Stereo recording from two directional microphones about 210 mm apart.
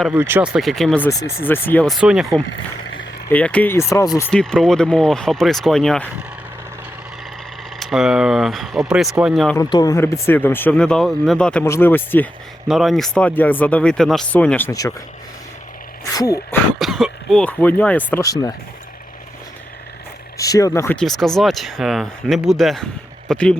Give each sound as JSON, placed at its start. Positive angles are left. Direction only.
{"t": 0.1, "sound": "speech", "side_deg": -10}
{"t": 4.3, "sound": "speech", "side_deg": 5}
{"t": 7.8, "sound": "speech", "side_deg": 0}
{"t": 9.6, "sound": "speech", "side_deg": 20}
{"t": 16.1, "sound": "speech", "side_deg": 15}
{"t": 16.7, "sound": "speech", "side_deg": 0}
{"t": 20.4, "sound": "speech", "side_deg": 15}